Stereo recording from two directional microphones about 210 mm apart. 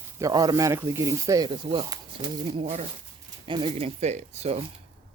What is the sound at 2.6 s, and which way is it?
Speech, 30° right (ahead or behind).